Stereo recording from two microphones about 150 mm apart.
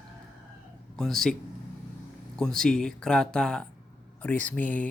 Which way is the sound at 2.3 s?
5° left (ahead or behind).